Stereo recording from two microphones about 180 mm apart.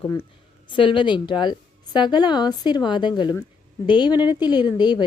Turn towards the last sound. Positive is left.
turn(degrees=25)  # may be behind; listen again after turning